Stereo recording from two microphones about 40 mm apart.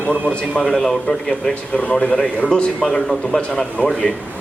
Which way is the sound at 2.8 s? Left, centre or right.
Centre.